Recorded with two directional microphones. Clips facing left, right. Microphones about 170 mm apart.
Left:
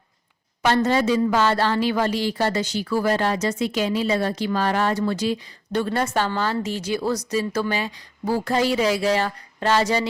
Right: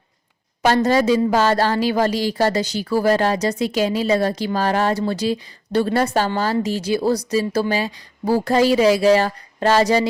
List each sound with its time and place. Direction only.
1.1 s speech: 40° right (ahead or behind)